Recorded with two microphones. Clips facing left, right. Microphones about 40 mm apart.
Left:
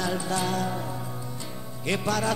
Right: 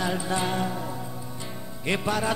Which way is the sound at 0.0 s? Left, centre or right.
Right.